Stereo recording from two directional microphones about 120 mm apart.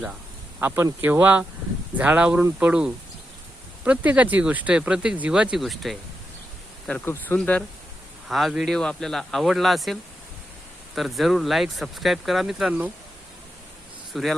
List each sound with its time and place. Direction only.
0.6 s speech: 20° right (ahead or behind); by 6.0 s centre (ahead or behind)
7.0 s speech: 20° left (ahead or behind)
8.3 s speech: centre (ahead or behind)
14.1 s speech: centre (ahead or behind)